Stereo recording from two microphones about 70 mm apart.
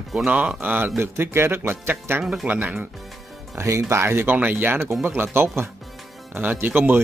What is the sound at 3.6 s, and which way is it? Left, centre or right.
Speech, right.